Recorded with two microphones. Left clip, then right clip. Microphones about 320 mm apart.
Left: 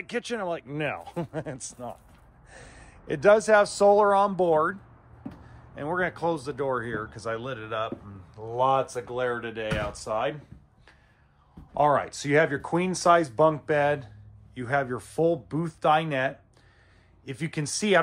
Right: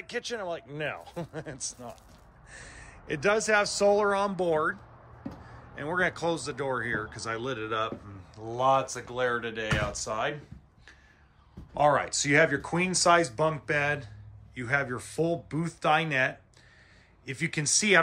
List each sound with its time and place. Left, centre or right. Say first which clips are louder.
0.0 s a man's voice: left 3 dB; left
5.8 s speech: left 1 dB; centre
11.7 s speech: left 1 dB; centre